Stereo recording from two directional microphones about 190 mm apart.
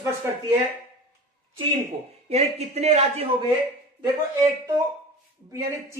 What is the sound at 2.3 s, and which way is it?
A man's voice, 35° right (ahead or behind).